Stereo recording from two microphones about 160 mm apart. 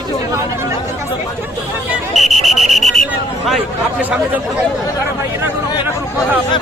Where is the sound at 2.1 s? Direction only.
Centre (ahead or behind).